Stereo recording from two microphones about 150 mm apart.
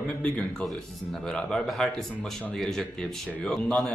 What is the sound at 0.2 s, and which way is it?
Speech, 10° left (ahead or behind).